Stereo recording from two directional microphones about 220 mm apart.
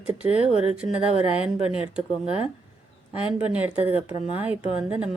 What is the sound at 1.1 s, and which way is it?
Speech, 30° left (ahead or behind).